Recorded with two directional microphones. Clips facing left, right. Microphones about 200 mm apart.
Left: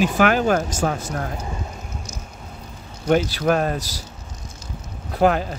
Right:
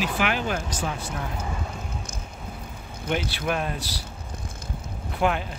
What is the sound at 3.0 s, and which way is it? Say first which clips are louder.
Speech: left 9 dB; 40° left (ahead or behind).